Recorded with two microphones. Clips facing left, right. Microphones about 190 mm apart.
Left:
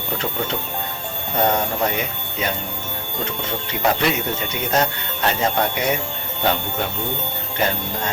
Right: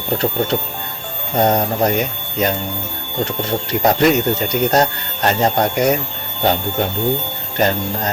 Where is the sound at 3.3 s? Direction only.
40° right (ahead or behind).